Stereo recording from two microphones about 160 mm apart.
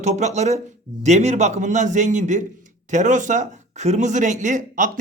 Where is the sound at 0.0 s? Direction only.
45° right (ahead or behind).